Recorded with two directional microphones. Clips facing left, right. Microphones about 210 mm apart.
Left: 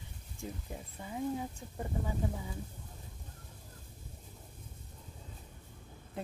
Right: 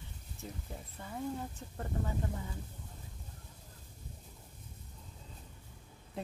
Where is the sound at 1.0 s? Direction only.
15° left (ahead or behind).